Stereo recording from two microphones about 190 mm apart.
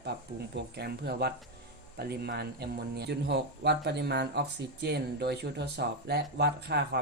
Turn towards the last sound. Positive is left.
turn(degrees=-60)  # may be behind; listen again after turning